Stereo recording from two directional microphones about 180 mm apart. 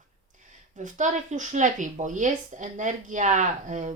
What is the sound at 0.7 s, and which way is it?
Speech, 45° right (ahead or behind).